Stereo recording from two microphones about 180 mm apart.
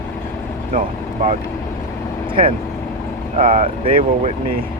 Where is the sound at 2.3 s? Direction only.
30° right (ahead or behind).